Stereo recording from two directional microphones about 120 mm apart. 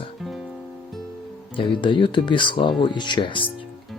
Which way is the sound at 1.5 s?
45° left (ahead or behind).